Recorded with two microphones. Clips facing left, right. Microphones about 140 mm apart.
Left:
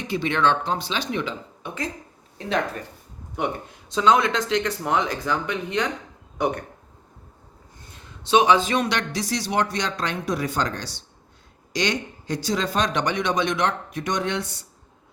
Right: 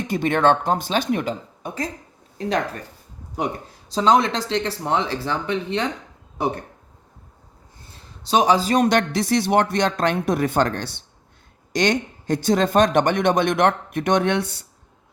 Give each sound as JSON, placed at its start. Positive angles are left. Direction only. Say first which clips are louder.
{"t": 0.1, "sound": "a man's voice", "louder": "right 4 dB", "side_deg": -50}
{"t": 3.3, "sound": "speech", "louder": "right 1 dB", "side_deg": -35}
{"t": 7.9, "sound": "a man's voice", "louder": "even", "side_deg": -35}